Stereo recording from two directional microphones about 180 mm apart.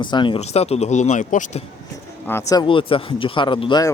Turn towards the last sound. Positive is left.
turn(degrees=25)  # may be behind; listen again after turning